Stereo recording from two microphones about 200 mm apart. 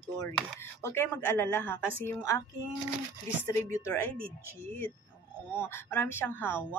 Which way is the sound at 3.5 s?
15° left (ahead or behind).